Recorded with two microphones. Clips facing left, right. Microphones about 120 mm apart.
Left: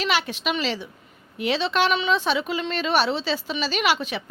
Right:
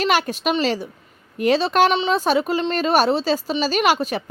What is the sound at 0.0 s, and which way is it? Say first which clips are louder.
A woman's voice: right 5 dB; 45° right (ahead or behind).